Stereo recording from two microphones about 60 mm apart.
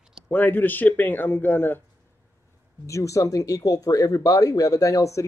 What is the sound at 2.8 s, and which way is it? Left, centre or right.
Speech, left.